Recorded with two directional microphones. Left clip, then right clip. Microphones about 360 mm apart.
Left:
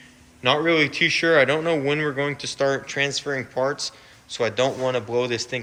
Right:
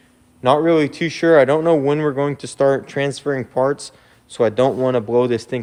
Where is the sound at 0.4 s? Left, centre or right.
Centre.